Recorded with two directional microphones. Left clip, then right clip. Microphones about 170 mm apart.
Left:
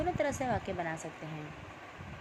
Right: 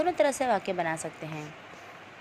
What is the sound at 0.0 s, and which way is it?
Speech, 25° right (ahead or behind).